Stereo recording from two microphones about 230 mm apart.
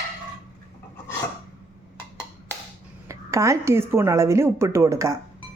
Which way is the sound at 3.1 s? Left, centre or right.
Centre.